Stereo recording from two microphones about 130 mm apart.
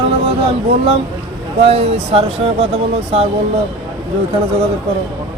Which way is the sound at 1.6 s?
50° right (ahead or behind).